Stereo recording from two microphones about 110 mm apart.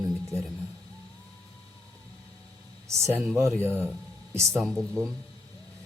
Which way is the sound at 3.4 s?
20° right (ahead or behind).